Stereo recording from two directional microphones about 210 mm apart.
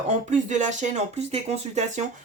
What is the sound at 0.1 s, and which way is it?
Speech, 35° right (ahead or behind).